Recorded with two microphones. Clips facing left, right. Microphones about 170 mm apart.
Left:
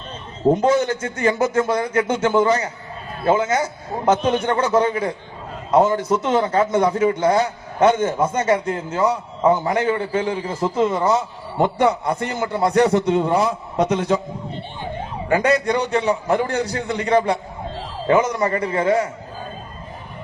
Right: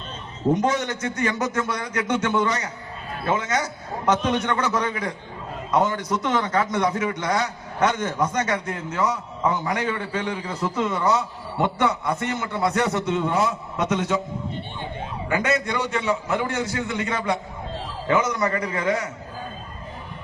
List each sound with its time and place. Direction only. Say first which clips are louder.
0.5 s a man's voice: left 4 dB; 30° left (ahead or behind)
15.3 s a man's voice: left 6 dB; 35° left (ahead or behind)